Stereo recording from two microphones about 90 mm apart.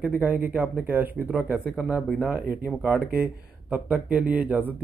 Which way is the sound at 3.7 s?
15° right (ahead or behind).